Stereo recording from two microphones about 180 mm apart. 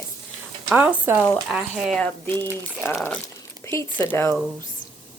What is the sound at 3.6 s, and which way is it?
Speech, 15° left (ahead or behind).